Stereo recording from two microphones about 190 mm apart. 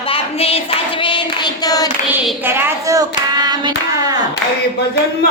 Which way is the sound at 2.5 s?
15° right (ahead or behind).